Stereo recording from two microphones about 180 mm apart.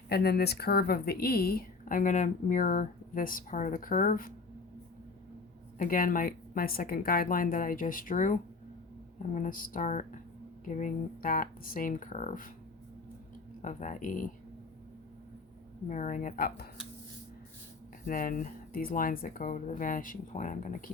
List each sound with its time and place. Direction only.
0.1 s speech: 60° left (ahead or behind)
5.8 s speech: 50° left (ahead or behind)
13.6 s speech: 40° left (ahead or behind)
15.9 s speech: 45° left (ahead or behind)
18.0 s speech: 50° left (ahead or behind)